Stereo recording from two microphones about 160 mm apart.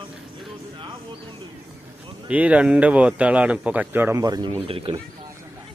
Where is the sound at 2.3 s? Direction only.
10° right (ahead or behind); by 4.6 s 25° right (ahead or behind).